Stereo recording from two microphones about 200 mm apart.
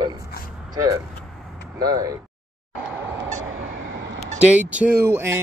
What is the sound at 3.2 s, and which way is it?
Vehicle, 75° right (ahead or behind).